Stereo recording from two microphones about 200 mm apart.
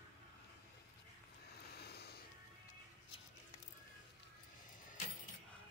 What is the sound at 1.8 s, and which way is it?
Music, 55° left (ahead or behind).